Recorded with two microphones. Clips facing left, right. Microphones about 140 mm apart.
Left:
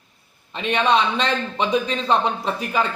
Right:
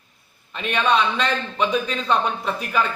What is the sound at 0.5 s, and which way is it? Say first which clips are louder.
A man's voice: left 1 dB; 25° left (ahead or behind).